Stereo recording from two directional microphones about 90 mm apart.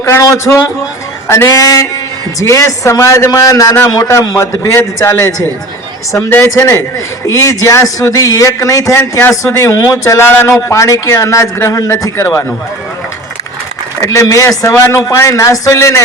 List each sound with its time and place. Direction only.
0.0 s speech: 30° left (ahead or behind)
1.6 s a sound: 40° left (ahead or behind)
2.4 s speech: 35° left (ahead or behind)
9.0 s a man's voice: 25° left (ahead or behind)
14.1 s speech: 35° left (ahead or behind)